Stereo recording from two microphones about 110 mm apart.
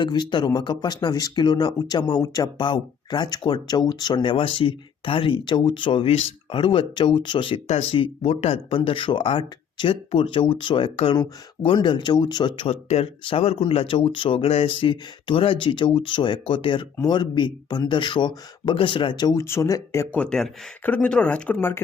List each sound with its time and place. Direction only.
0.0 s speech: 45° left (ahead or behind)
2.6 s speech: 45° left (ahead or behind)
10.9 s speech: 55° left (ahead or behind)
12.7 s speech: 70° left (ahead or behind); by 19.4 s 40° left (ahead or behind)
19.4 s speech: 25° left (ahead or behind)
20.1 s speech: 10° left (ahead or behind)